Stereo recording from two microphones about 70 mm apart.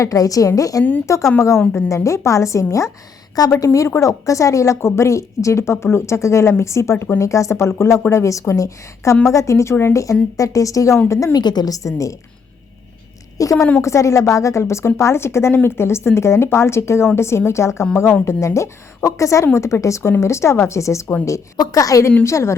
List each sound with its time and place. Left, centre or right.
0.0 s a woman's voice: left
11.3 s a woman's voice: left
13.4 s a woman's voice: left
21.6 s a woman's voice: left
22.2 s a woman's voice: left